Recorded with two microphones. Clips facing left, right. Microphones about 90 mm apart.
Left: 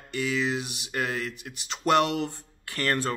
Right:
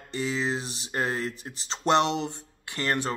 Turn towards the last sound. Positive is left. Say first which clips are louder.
# left 1 dB
turn(degrees=-20)  # may be behind; listen again after turning